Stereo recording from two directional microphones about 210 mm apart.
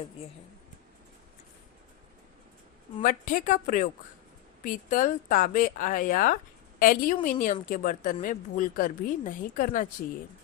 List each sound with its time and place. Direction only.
3.0 s speech: 40° left (ahead or behind)